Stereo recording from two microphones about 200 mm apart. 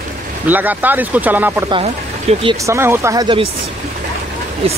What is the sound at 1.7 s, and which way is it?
Speech, 30° right (ahead or behind).